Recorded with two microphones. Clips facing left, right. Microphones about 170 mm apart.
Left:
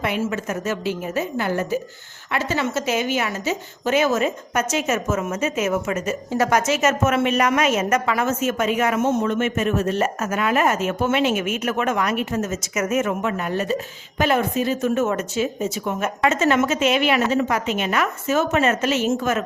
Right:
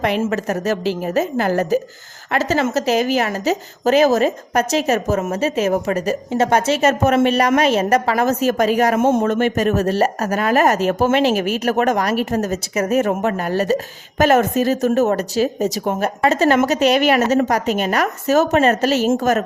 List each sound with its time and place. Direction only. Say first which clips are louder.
0.0 s a woman's voice: right 5 dB; 45° right (ahead or behind)
9.0 s a woman's voice: right 4 dB; 50° right (ahead or behind)